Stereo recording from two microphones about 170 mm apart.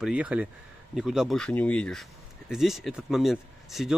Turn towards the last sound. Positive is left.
turn(degrees=0)  # may be behind; listen again after turning